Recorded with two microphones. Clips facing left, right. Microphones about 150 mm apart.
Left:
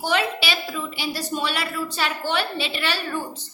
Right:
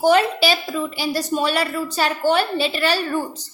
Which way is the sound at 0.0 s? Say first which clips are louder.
Right 8 dB; 45° right (ahead or behind).